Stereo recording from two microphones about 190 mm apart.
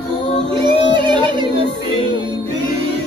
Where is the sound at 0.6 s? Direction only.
25° right (ahead or behind).